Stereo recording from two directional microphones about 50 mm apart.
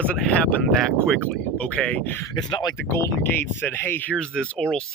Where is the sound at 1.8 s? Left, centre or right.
Left.